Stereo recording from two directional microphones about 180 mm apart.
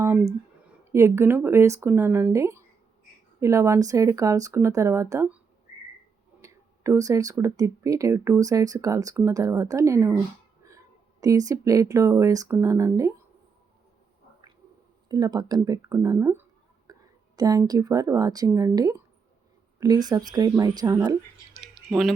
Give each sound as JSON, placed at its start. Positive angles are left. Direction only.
{"t": 0.0, "sound": "a sound", "side_deg": -10}
{"t": 0.9, "sound": "speech", "side_deg": -15}
{"t": 6.4, "sound": "speech", "side_deg": -15}
{"t": 11.2, "sound": "speech", "side_deg": -20}
{"t": 15.1, "sound": "speech", "side_deg": -20}